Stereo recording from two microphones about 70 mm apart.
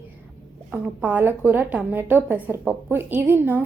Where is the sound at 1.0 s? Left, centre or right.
Right.